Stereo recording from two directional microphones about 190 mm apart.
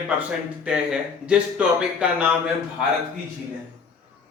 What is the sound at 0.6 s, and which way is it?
Speech, 5° right (ahead or behind).